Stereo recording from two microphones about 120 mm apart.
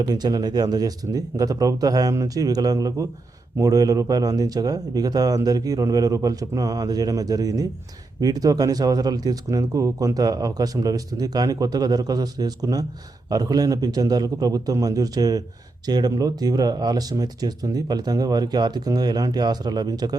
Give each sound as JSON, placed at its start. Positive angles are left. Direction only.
{"t": 0.0, "sound": "speech", "side_deg": -35}